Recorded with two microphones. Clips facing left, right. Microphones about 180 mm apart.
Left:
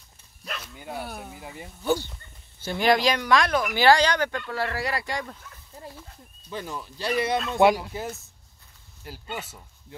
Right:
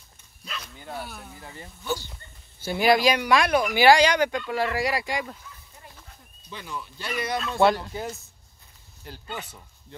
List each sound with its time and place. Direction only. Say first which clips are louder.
1.3 s speech: left 2 dB; 15° left (ahead or behind)
2.6 s speech: right 1 dB; 10° right (ahead or behind)
5.8 s a sound: left 11 dB; 30° left (ahead or behind)
6.5 s speech: left 3 dB; 40° left (ahead or behind); by 9.9 s 5° left (ahead or behind)